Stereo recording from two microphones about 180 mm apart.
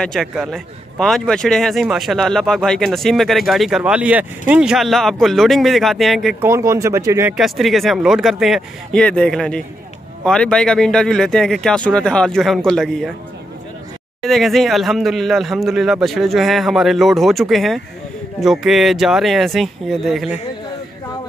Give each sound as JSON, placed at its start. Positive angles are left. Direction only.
{"t": 0.0, "sound": "speech", "side_deg": 0}
{"t": 6.4, "sound": "speech", "side_deg": -15}
{"t": 7.3, "sound": "speech", "side_deg": 0}
{"t": 14.2, "sound": "speech", "side_deg": 0}